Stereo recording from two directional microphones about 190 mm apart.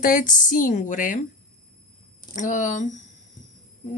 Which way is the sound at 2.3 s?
40° left (ahead or behind).